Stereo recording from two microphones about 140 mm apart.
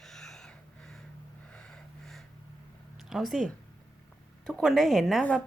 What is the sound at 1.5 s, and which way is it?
Snort, 5° left (ahead or behind).